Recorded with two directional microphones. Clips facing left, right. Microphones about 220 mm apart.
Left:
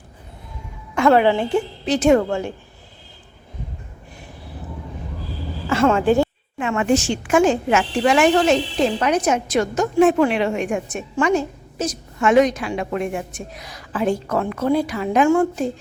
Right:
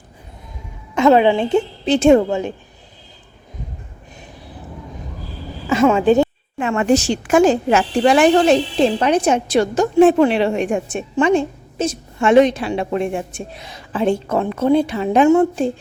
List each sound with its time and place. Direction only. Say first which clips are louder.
0.9 s a woman's voice: right 3 dB; 20° right (ahead or behind)
5.6 s a woman's voice: right 3 dB; 15° right (ahead or behind)
6.6 s a woman's voice: right 3 dB; 40° right (ahead or behind)